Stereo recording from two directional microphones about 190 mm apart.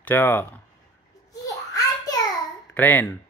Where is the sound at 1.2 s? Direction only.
20° left (ahead or behind).